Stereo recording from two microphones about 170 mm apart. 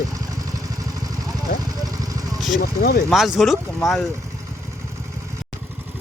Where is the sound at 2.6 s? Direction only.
60° left (ahead or behind).